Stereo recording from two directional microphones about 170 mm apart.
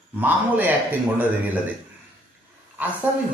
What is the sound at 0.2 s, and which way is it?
Speech, 10° right (ahead or behind).